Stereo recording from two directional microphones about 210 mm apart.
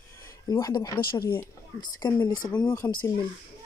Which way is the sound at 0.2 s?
15° left (ahead or behind).